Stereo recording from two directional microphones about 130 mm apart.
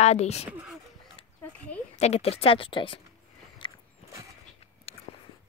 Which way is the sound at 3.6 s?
40° left (ahead or behind).